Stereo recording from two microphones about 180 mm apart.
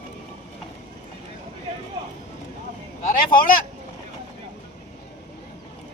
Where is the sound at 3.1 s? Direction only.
50° left (ahead or behind).